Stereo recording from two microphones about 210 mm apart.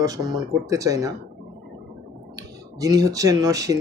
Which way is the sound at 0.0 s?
20° right (ahead or behind).